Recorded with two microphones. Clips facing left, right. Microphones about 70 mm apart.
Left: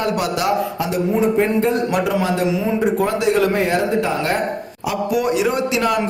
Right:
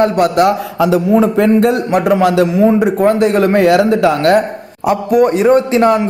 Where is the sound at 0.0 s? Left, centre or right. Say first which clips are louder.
Right 9 dB; right.